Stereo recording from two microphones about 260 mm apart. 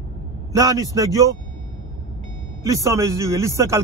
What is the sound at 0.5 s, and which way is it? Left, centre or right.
Speech, centre.